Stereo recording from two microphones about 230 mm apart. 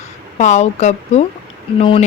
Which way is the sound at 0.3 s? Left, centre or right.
Left.